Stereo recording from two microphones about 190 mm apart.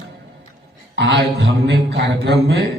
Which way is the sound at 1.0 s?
70° right (ahead or behind).